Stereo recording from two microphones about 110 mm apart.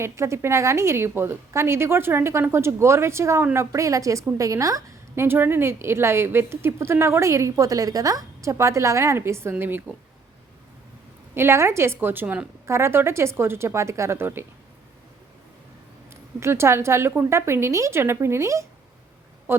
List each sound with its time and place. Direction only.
0.0 s a woman's voice: 25° right (ahead or behind)
11.3 s a woman's voice: 25° right (ahead or behind)
16.4 s a woman's voice: 25° right (ahead or behind)